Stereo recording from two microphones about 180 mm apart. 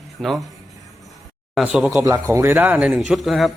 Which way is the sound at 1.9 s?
15° right (ahead or behind).